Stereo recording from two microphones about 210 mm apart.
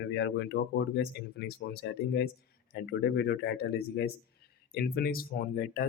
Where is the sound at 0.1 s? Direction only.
55° left (ahead or behind).